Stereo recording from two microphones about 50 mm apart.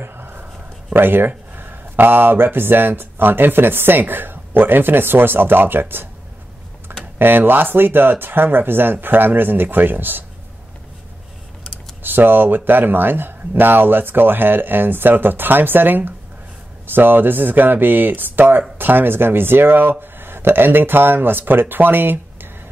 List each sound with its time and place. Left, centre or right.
0.0 s dog: right
0.9 s speech: right
7.2 s speech: right
12.0 s speech: right